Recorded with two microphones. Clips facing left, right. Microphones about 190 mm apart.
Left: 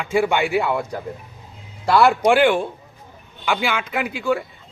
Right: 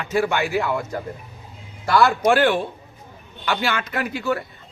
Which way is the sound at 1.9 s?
15° left (ahead or behind).